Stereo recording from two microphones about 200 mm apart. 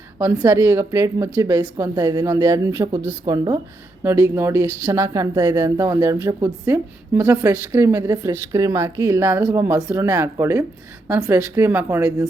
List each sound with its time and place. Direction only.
0.2 s speech: 15° right (ahead or behind)